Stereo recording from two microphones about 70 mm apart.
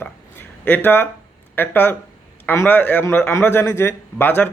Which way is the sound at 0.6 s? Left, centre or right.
Left.